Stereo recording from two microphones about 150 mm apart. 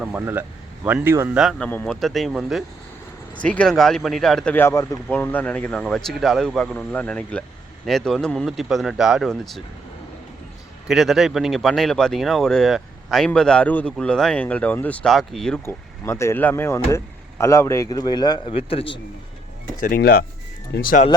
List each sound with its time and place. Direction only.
0.0 s speech: 15° right (ahead or behind)
1.4 s speech: centre (ahead or behind)
4.5 s speech: 15° left (ahead or behind)
10.8 s speech: centre (ahead or behind)
15.6 s speech: 20° left (ahead or behind)
18.5 s a man's voice: 40° left (ahead or behind)
19.8 s speech: 90° left